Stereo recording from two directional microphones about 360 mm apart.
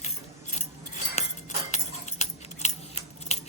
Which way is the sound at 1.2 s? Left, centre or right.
Centre.